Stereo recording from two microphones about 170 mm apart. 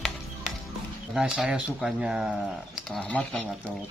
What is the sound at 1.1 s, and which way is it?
Speech, 5° right (ahead or behind).